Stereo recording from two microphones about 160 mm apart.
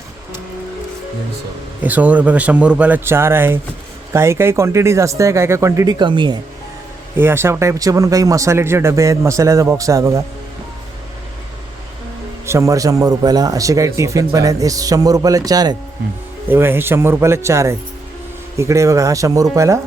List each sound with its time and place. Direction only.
1.8 s a man's voice: 10° right (ahead or behind); by 6.4 s 30° right (ahead or behind)
7.2 s a man's voice: 15° right (ahead or behind)
12.5 s a man's voice: 20° right (ahead or behind)